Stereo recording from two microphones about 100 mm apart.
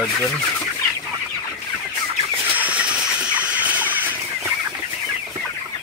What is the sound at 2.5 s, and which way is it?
Fowl, 15° right (ahead or behind).